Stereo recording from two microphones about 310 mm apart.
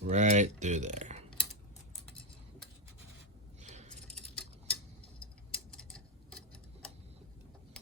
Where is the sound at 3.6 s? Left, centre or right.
Right.